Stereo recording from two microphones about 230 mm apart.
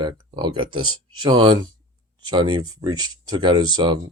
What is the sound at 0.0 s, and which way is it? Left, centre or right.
Speech, right.